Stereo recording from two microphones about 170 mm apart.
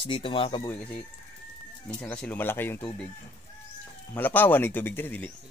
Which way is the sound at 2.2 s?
10° left (ahead or behind).